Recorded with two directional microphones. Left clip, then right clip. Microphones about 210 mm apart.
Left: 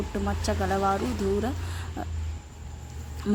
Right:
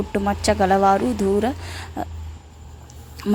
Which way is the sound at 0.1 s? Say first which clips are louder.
Right 12 dB; 35° right (ahead or behind).